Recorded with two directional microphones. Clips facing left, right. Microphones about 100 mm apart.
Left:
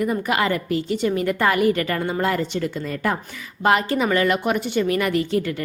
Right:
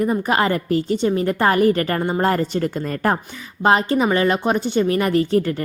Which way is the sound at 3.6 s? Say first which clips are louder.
Right 2 dB; 30° right (ahead or behind).